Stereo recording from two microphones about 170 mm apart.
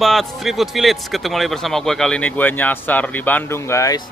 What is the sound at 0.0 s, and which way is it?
A man's voice, centre (ahead or behind).